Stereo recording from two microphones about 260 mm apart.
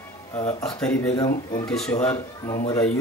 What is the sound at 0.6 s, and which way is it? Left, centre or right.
Speech, centre.